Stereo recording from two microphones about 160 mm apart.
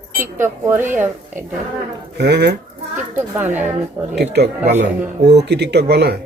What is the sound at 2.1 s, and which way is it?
Speech, 90° right.